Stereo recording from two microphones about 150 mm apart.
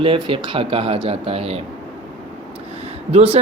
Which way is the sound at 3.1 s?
45° right (ahead or behind).